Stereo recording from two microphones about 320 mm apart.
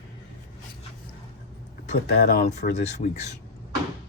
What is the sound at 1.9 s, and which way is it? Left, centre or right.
Speech, left.